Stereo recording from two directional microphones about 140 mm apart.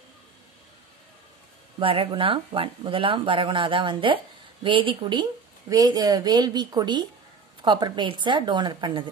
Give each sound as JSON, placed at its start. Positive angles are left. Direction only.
{"t": 1.8, "sound": "a woman's voice", "side_deg": -40}